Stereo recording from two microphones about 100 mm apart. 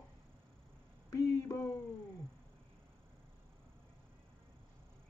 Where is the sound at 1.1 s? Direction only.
35° left (ahead or behind).